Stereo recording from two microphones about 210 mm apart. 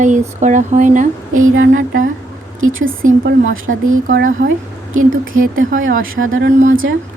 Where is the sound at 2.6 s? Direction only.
70° right (ahead or behind).